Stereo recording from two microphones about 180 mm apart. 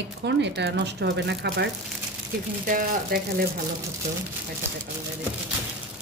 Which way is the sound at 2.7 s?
55° right (ahead or behind).